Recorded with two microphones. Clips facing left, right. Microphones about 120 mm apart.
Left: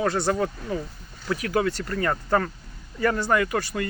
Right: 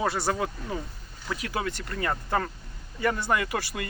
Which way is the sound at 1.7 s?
15° right (ahead or behind).